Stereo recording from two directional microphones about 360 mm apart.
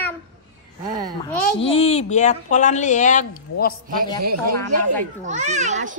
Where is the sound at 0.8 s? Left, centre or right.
Right.